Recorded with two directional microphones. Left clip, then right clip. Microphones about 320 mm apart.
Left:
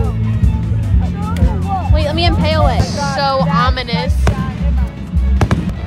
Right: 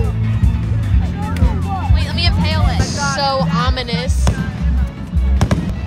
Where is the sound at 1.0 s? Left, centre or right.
Centre.